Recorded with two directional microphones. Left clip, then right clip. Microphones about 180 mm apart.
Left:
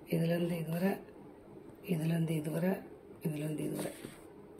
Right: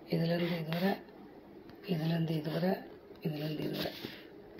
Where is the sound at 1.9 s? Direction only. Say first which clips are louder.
Right 1 dB; centre (ahead or behind).